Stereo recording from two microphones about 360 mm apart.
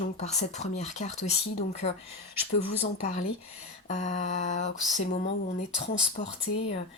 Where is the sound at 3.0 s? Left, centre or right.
Centre.